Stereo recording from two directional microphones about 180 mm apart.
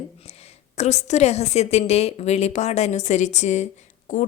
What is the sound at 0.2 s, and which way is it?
A woman's voice, 35° left (ahead or behind).